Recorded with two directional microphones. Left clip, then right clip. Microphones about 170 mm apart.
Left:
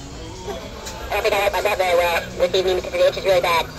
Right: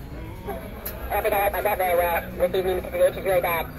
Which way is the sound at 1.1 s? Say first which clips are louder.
Left 4 dB; 40° left (ahead or behind).